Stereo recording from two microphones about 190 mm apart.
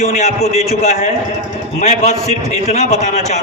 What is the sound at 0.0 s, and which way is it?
A man's voice, 35° left (ahead or behind).